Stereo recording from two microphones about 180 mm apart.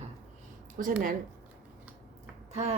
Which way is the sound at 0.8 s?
50° right (ahead or behind).